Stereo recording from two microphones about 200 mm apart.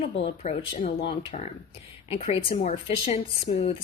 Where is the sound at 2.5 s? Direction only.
30° left (ahead or behind).